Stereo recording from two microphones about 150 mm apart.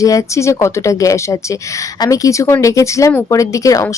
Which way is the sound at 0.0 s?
20° left (ahead or behind).